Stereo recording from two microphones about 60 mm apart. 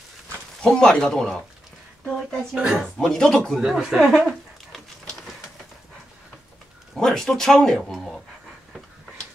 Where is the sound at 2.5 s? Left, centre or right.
Centre.